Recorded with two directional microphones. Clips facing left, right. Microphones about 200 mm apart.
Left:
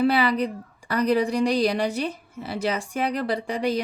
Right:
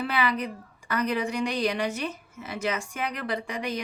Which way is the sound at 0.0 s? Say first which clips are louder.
Left 7 dB; 35° left (ahead or behind).